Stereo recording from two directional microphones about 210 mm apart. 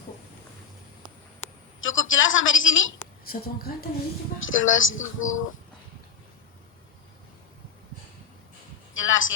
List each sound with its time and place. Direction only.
1.8 s a woman's voice: 70° left (ahead or behind)
3.2 s a woman's voice: 45° left (ahead or behind)
4.4 s speech: 70° left (ahead or behind)
9.0 s speech: 70° left (ahead or behind)